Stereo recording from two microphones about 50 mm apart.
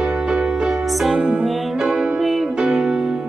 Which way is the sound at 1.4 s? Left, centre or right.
Centre.